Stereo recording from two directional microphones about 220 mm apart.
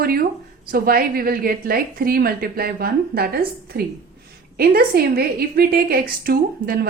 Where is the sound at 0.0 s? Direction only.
45° right (ahead or behind).